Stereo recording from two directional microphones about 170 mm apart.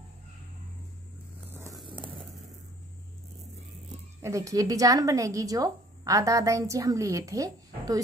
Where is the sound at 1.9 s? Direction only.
30° right (ahead or behind).